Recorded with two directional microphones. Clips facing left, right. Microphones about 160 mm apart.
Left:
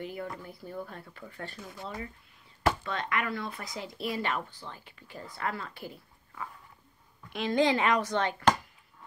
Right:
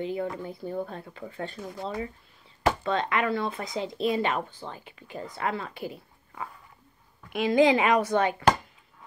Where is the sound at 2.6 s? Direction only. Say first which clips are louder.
Right 4 dB; 25° right (ahead or behind).